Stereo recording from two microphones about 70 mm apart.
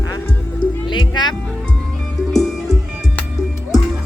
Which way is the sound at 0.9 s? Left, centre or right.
Left.